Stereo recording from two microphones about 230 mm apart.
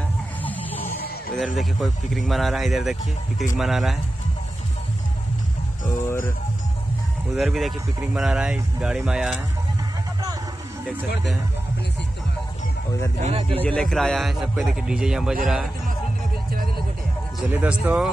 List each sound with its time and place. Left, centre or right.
0.4 s music: centre
1.4 s speech: centre
7.3 s speech: centre
13.2 s speech: right
13.6 s speech: centre
17.4 s speech: centre